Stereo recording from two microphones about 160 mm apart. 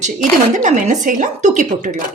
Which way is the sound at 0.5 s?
50° right (ahead or behind).